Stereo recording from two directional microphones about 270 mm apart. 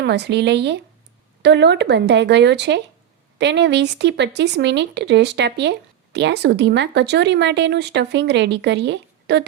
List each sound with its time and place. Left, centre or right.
0.0 s speech: right